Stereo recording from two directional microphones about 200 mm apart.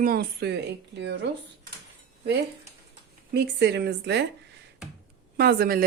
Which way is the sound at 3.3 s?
55° right (ahead or behind).